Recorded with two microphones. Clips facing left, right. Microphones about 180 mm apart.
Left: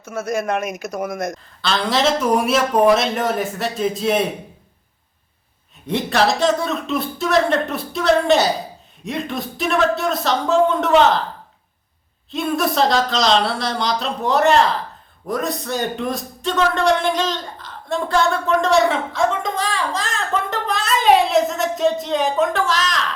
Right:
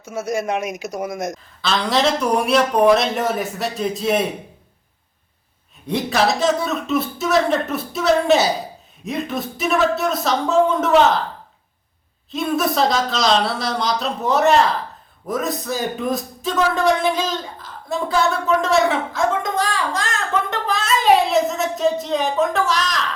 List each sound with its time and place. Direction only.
0.0 s speech: 15° right (ahead or behind)
1.6 s a man's voice: centre (ahead or behind)
5.8 s a man's voice: centre (ahead or behind)
12.3 s a man's voice: centre (ahead or behind)